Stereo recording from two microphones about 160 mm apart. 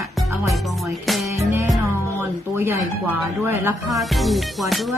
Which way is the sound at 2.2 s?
15° right (ahead or behind).